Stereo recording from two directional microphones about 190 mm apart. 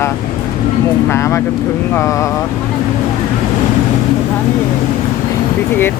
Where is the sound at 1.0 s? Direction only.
15° left (ahead or behind).